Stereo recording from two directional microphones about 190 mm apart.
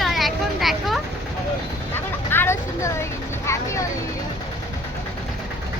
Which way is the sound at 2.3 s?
10° left (ahead or behind).